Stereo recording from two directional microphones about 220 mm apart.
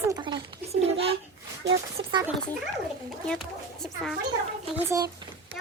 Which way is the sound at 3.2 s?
Centre (ahead or behind).